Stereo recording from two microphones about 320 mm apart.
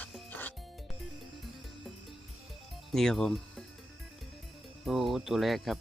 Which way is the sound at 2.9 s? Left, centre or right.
Centre.